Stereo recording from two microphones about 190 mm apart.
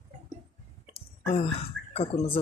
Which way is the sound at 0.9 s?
30° left (ahead or behind).